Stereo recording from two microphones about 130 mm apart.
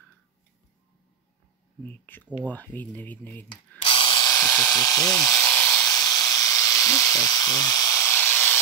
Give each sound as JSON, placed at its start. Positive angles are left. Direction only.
{"t": 2.4, "sound": "speech", "side_deg": 15}
{"t": 3.8, "sound": "electric toothbrush", "side_deg": 40}
{"t": 5.4, "sound": "electric toothbrush", "side_deg": 10}
{"t": 5.8, "sound": "electric toothbrush", "side_deg": 30}